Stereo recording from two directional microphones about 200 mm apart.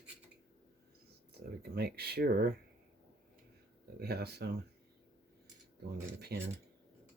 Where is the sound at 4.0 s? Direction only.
55° right (ahead or behind).